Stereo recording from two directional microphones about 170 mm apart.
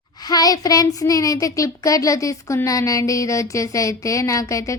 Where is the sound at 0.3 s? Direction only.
20° left (ahead or behind).